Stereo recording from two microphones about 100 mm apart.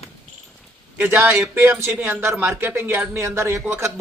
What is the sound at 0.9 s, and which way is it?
A man's voice, 20° right (ahead or behind).